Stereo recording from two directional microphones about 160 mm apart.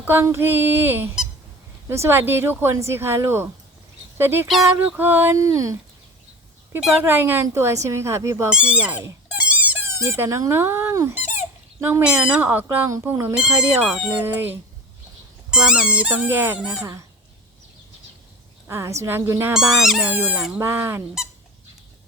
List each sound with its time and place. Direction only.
0.0 s speech: 15° right (ahead or behind)
4.4 s speech: centre (ahead or behind); by 5.7 s 20° right (ahead or behind)
6.7 s speech: 5° right (ahead or behind)
8.4 s speech: 5° right (ahead or behind)
18.7 s speech: 15° right (ahead or behind)
19.5 s speech: 5° right (ahead or behind)